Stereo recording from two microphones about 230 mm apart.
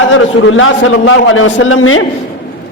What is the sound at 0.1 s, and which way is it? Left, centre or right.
A man's voice, left.